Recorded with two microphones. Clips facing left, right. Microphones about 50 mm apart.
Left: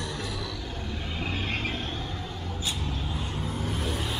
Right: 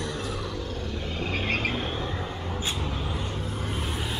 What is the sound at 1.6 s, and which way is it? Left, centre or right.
Vehicle, centre.